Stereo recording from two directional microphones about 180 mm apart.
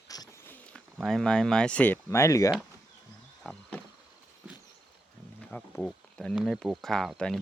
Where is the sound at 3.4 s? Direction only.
5° left (ahead or behind).